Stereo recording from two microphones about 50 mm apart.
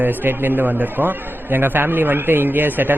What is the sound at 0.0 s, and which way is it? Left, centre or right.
A man's voice, right.